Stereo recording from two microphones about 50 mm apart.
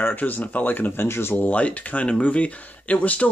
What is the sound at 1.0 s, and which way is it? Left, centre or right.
Speech, left.